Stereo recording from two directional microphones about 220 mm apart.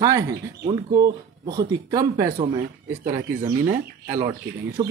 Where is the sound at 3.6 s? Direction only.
10° right (ahead or behind).